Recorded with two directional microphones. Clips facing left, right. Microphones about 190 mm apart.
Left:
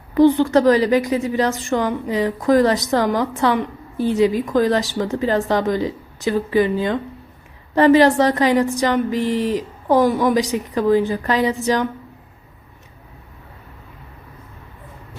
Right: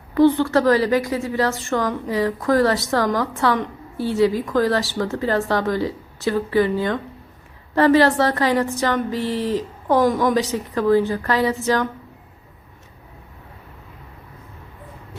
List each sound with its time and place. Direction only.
0.1 s a woman's voice: 15° left (ahead or behind)